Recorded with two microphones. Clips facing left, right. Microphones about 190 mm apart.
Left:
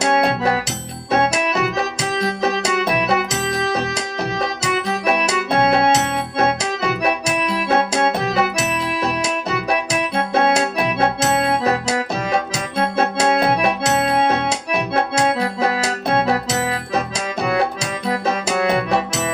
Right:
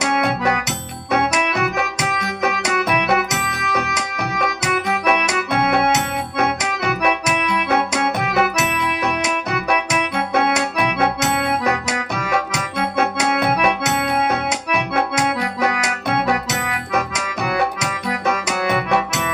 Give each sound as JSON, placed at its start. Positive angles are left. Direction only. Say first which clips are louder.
{"t": 0.0, "sound": "keyboard", "louder": "left 2 dB", "side_deg": 30}
{"t": 1.1, "sound": "music", "louder": "left 1 dB", "side_deg": 30}